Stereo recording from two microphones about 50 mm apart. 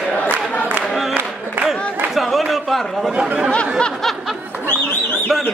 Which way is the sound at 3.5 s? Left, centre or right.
Left.